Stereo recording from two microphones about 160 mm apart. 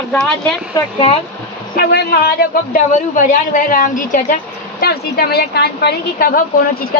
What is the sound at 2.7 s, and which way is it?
A woman's voice, 55° left (ahead or behind).